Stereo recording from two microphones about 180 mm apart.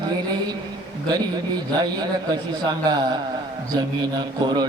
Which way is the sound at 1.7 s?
20° right (ahead or behind).